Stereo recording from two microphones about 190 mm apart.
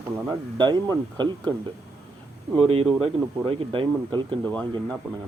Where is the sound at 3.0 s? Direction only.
25° right (ahead or behind).